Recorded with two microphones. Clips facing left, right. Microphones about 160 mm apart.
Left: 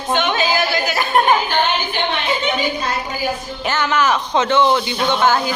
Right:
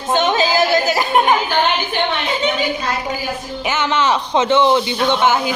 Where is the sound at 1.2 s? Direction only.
15° right (ahead or behind).